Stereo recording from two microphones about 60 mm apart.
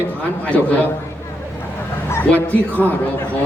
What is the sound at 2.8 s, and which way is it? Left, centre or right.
Speech, left.